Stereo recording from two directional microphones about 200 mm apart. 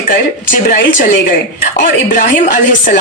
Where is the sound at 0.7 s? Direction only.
45° left (ahead or behind).